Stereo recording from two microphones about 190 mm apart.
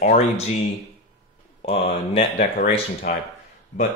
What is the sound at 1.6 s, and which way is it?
Speech, 35° left (ahead or behind).